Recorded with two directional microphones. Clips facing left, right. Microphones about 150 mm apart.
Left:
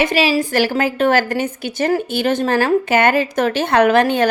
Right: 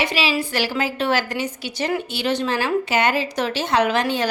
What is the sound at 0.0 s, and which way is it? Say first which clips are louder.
A woman's voice: left 6 dB; 50° left (ahead or behind).